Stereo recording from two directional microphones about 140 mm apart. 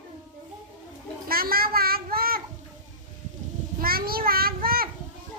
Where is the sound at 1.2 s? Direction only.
90° right.